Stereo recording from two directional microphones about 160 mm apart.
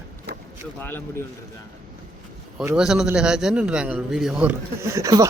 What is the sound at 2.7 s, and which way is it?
A man's voice, 5° right (ahead or behind).